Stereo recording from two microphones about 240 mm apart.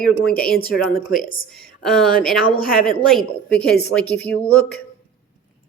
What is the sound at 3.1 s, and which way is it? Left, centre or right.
Speech, centre.